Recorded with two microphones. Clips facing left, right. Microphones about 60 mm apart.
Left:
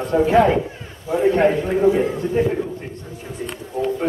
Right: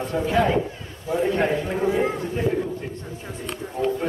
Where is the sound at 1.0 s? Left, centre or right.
Centre.